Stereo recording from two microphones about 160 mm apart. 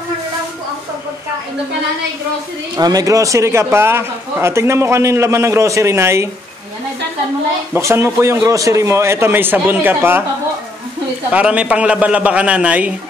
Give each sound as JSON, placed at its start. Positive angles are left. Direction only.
{"t": 2.7, "sound": "a man's voice", "side_deg": -25}
{"t": 7.7, "sound": "a man's voice", "side_deg": -15}
{"t": 11.3, "sound": "a man's voice", "side_deg": -10}